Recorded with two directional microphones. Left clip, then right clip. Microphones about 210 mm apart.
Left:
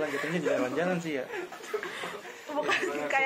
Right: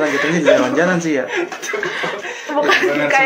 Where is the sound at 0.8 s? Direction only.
35° left (ahead or behind).